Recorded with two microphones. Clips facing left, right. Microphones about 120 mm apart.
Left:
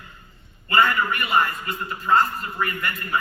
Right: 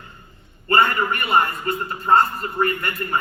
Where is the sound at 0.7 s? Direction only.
40° right (ahead or behind).